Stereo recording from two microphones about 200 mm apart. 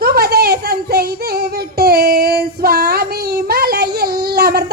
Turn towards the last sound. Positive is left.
turn(degrees=-50)  # may be behind; listen again after turning